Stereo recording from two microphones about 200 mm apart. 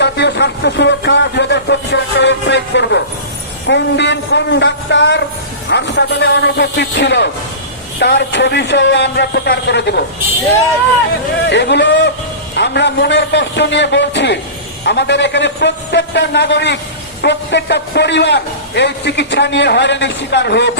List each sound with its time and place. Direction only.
0.0 s a man's voice: 60° left (ahead or behind)
11.4 s a man's voice: 60° left (ahead or behind)